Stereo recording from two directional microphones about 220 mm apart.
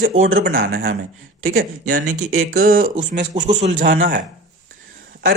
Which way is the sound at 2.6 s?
40° right (ahead or behind).